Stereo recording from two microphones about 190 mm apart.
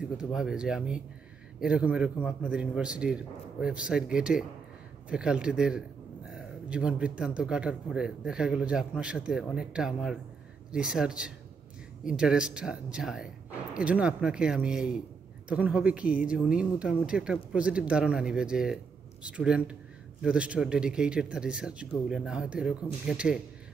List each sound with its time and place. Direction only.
0.2 s a man's voice: centre (ahead or behind)